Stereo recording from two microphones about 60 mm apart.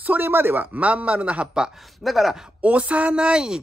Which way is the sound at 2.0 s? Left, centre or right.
Centre.